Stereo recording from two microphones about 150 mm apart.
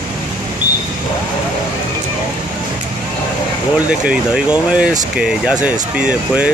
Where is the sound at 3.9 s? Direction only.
5° right (ahead or behind).